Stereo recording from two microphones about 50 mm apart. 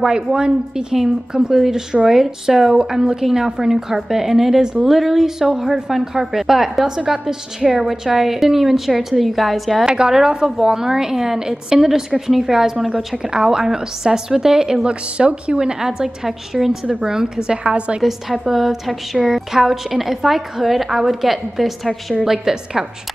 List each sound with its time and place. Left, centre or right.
0.0 s a woman's voice: centre
9.8 s a woman's voice: centre
18.0 s a woman's voice: centre